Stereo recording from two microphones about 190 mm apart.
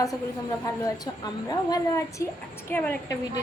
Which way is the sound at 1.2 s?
20° left (ahead or behind).